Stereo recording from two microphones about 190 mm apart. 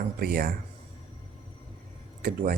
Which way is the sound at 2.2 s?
45° right (ahead or behind).